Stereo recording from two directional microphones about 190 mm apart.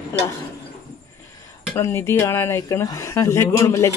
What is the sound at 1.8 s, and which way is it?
Speech, 15° left (ahead or behind).